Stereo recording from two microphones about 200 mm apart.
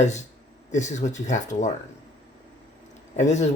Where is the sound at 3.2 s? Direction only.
35° left (ahead or behind).